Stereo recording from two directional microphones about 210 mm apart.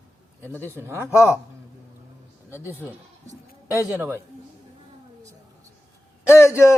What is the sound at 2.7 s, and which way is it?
Speech, 10° right (ahead or behind).